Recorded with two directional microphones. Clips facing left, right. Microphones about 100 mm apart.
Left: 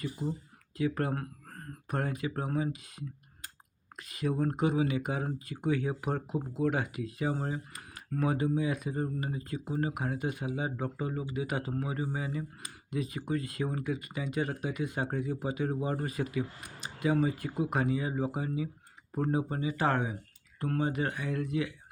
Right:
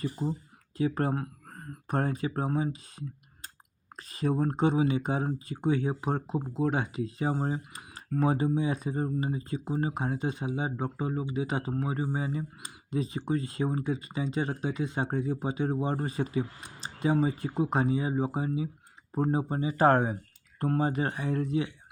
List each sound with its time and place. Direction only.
0.0 s speech: 35° right (ahead or behind)
1.1 s a sound: 15° right (ahead or behind)
1.9 s speech: 35° right (ahead or behind)